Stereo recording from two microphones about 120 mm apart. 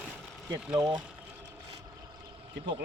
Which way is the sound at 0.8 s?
35° right (ahead or behind).